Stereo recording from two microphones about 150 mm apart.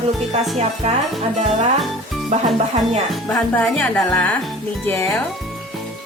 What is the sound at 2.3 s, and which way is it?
Speech, 50° right (ahead or behind).